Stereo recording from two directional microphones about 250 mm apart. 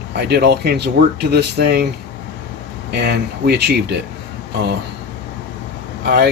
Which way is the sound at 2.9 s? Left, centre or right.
Right.